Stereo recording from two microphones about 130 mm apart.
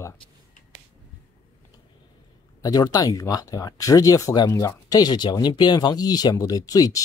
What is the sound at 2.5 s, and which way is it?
Speech, 30° left (ahead or behind).